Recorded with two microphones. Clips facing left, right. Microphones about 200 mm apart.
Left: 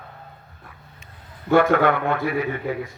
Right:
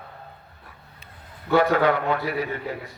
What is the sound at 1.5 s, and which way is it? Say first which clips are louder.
A man's voice: left 2 dB; 55° left (ahead or behind).